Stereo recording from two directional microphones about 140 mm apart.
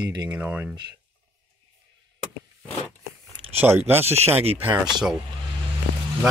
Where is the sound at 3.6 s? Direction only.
15° right (ahead or behind).